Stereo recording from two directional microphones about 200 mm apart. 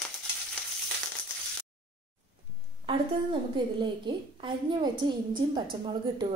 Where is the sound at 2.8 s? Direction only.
25° right (ahead or behind).